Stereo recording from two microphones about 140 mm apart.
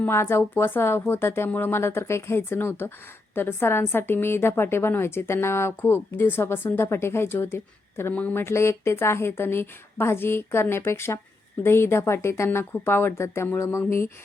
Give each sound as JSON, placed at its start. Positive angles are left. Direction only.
{"t": 0.0, "sound": "a woman's voice", "side_deg": 15}